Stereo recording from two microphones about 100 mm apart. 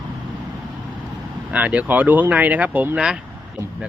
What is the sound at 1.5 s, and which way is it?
Speech, 15° right (ahead or behind).